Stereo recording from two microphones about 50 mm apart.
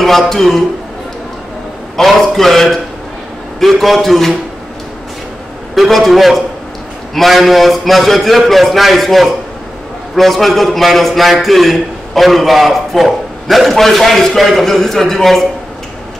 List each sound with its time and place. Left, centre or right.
0.3 s a man's voice: centre
2.0 s a man's voice: centre
5.8 s a man's voice: centre